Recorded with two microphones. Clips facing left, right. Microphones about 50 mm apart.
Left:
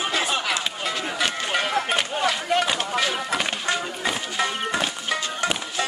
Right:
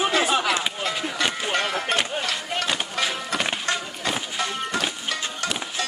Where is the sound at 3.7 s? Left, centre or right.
Centre.